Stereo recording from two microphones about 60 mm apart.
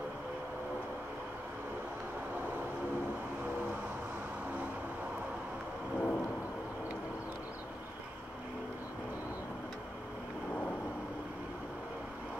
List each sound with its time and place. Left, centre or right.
5.9 s vehicle: left